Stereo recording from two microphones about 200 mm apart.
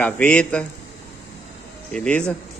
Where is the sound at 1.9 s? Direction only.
5° left (ahead or behind).